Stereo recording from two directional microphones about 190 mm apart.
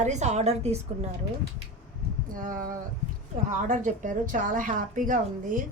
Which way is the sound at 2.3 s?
45° right (ahead or behind).